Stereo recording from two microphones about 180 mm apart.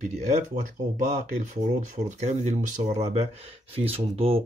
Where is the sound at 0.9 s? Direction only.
45° right (ahead or behind).